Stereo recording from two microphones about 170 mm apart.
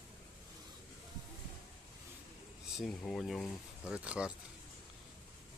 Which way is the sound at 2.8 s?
5° left (ahead or behind).